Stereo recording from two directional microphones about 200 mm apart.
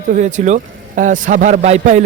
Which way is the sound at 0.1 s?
40° right (ahead or behind).